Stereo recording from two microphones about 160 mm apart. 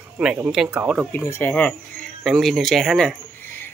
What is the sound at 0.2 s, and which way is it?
Speech, 5° right (ahead or behind).